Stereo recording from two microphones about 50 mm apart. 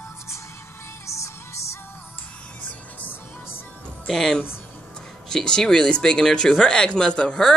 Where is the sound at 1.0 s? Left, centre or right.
Left.